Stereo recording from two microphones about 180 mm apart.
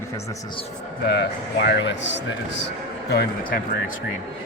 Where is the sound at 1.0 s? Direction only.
70° left (ahead or behind); by 2.2 s 85° left.